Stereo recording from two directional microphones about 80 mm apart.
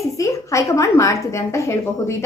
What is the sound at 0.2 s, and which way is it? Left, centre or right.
Speech, left.